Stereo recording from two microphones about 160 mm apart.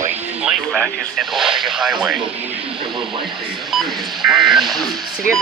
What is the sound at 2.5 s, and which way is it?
Speech, 35° right (ahead or behind).